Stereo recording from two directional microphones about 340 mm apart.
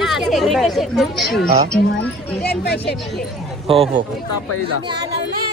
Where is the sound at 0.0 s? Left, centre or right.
Centre.